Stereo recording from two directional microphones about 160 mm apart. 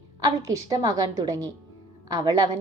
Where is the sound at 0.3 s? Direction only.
20° right (ahead or behind).